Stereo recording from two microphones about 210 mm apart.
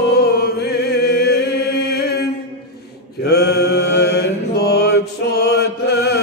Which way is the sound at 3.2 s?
50° left (ahead or behind).